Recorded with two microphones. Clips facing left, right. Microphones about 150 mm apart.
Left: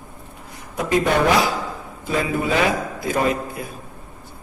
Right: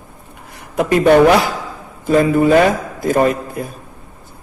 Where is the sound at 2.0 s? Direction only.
45° right (ahead or behind).